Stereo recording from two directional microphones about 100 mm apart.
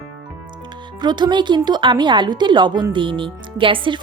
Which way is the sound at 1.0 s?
50° right (ahead or behind).